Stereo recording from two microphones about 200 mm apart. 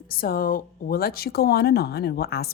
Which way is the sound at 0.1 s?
45° left (ahead or behind).